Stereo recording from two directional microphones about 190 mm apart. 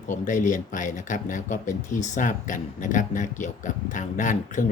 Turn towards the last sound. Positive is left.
turn(degrees=40)  # may be behind; listen again after turning